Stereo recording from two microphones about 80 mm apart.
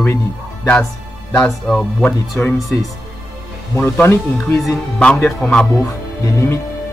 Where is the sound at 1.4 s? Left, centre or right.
Centre.